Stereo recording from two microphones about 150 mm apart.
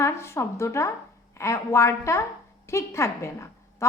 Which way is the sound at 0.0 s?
20° left (ahead or behind).